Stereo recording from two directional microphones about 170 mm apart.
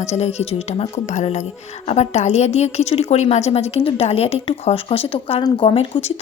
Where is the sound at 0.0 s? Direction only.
40° left (ahead or behind).